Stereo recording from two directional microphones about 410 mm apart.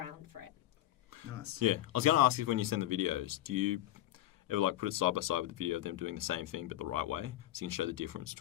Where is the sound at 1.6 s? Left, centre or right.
Right.